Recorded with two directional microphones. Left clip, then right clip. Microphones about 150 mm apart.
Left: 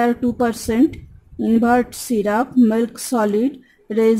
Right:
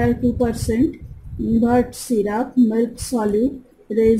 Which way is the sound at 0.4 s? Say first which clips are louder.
Left 2 dB; 45° left (ahead or behind).